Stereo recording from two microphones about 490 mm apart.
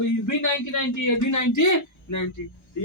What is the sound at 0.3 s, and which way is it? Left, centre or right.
Speech, left.